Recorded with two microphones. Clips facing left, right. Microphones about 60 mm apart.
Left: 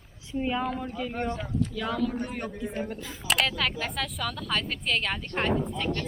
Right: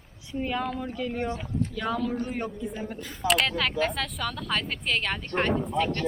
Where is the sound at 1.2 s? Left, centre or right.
Centre.